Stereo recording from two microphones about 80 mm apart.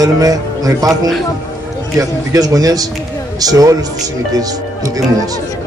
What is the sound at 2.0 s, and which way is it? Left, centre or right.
A man's voice, right.